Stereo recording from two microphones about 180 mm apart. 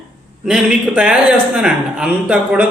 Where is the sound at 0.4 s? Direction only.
5° right (ahead or behind).